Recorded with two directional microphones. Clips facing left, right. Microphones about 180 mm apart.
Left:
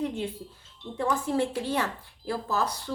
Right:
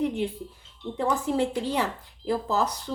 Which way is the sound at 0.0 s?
15° right (ahead or behind).